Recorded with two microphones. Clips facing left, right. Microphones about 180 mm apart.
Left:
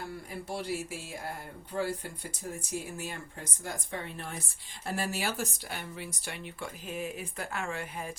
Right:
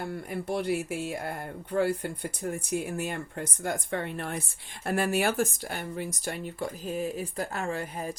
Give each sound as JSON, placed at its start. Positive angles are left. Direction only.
{"t": 0.0, "sound": "speech", "side_deg": -60}